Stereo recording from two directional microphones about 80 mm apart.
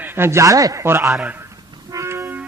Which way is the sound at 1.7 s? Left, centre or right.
Right.